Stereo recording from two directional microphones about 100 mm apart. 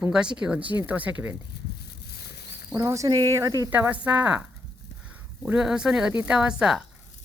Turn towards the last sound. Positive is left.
turn(degrees=-5)  # may be behind; listen again after turning